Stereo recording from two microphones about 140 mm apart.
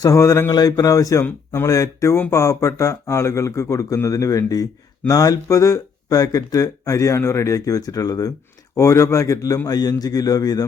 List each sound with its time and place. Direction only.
0.0 s speech: 20° left (ahead or behind)